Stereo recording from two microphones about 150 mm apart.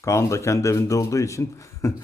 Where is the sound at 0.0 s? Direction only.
20° left (ahead or behind).